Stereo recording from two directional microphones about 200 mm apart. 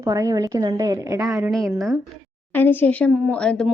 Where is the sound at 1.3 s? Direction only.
Centre (ahead or behind).